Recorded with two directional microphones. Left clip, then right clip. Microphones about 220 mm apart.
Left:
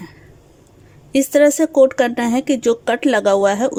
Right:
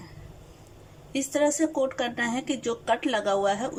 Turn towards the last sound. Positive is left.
turn(degrees=55)  # may be behind; listen again after turning